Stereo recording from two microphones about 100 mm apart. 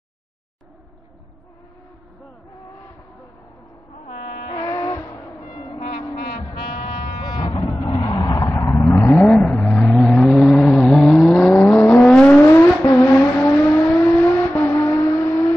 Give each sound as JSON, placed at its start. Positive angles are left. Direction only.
{"t": 4.5, "sound": "a sound", "side_deg": 35}
{"t": 5.7, "sound": "music", "side_deg": 55}
{"t": 7.8, "sound": "vehicle", "side_deg": 50}